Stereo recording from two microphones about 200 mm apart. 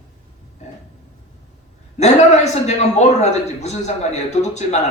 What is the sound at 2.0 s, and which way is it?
A man's voice, 35° left (ahead or behind).